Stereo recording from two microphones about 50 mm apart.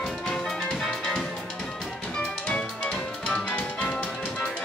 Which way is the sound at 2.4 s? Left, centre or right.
Left.